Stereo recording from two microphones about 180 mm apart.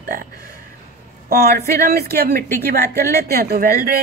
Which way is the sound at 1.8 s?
60° right (ahead or behind).